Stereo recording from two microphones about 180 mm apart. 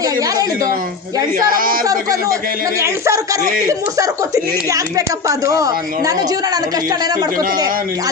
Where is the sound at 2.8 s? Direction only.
15° right (ahead or behind).